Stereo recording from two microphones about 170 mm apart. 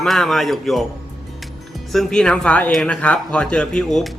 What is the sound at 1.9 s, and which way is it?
Speech, centre (ahead or behind).